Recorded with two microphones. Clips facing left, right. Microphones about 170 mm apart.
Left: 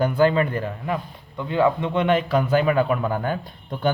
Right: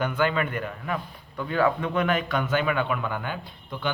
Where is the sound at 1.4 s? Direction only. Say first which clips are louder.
Left 3 dB; 20° left (ahead or behind); by 3.9 s 45° left (ahead or behind).